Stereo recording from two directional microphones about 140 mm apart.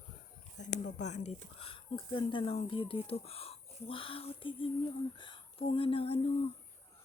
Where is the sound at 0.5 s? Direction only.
60° left (ahead or behind); by 6.3 s 40° left (ahead or behind).